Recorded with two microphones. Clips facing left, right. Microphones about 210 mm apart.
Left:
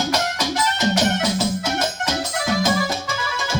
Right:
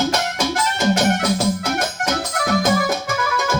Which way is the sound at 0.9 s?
55° right (ahead or behind).